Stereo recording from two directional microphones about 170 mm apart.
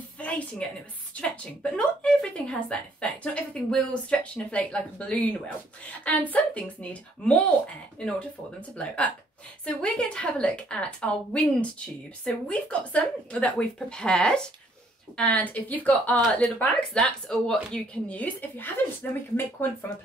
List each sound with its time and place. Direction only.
0.2 s a woman's voice: 10° left (ahead or behind)